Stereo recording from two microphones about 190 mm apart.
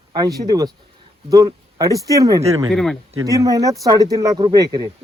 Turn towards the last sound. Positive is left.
turn(degrees=-20)  # may be behind; listen again after turning